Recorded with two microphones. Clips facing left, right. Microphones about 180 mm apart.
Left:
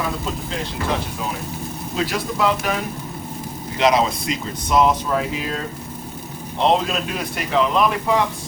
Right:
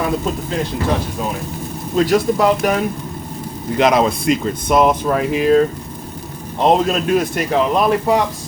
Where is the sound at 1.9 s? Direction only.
45° right (ahead or behind).